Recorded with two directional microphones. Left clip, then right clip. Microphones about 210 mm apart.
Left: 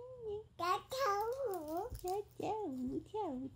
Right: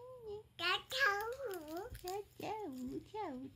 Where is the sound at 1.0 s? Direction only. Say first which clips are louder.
Even; 15° right (ahead or behind).